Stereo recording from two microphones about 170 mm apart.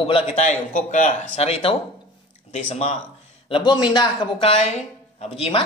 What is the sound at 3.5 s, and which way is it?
Speech, 25° left (ahead or behind).